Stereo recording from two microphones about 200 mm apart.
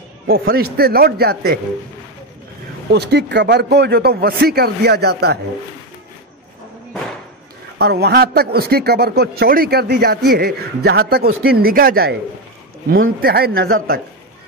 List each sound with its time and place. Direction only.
0.3 s a man's voice: 50° right (ahead or behind)
2.9 s a man's voice: 55° right (ahead or behind)
7.8 s a man's voice: 55° right (ahead or behind)
13.2 s a man's voice: 50° right (ahead or behind)